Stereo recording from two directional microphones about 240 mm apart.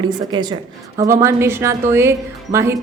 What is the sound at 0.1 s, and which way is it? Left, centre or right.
A woman's voice, centre.